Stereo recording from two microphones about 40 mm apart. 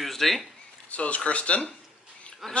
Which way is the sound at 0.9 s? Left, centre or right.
Left.